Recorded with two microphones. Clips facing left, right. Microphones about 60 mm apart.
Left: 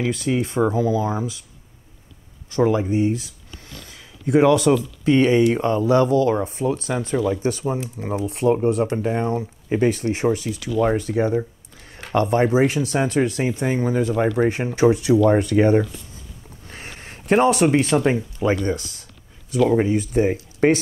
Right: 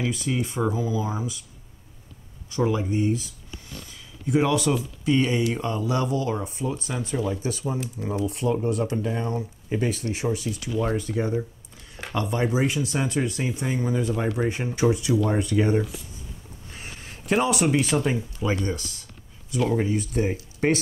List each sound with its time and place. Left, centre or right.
0.0 s speech: left
2.5 s speech: left
2.8 s speech: left
3.9 s a sound: left
5.0 s speech: left
9.0 s speech: left
16.6 s a sound: left
17.3 s speech: left
19.7 s speech: left